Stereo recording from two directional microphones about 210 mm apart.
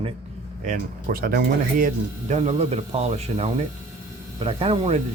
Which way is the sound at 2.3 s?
30° right (ahead or behind).